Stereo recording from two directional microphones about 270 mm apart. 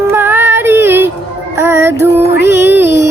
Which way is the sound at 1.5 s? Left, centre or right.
Centre.